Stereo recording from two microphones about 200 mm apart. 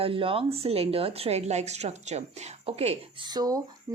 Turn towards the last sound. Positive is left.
turn(degrees=-20)  # may be behind; listen again after turning